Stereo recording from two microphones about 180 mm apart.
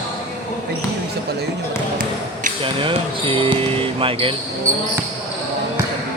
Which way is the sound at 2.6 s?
30° right (ahead or behind).